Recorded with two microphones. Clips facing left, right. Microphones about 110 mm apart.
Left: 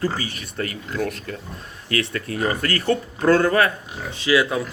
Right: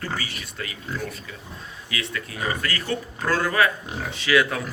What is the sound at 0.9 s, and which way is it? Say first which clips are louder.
Speech: left 7 dB; 55° left (ahead or behind).